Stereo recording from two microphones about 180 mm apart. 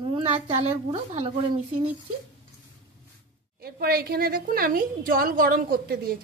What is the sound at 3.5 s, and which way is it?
A woman's voice, 60° right (ahead or behind).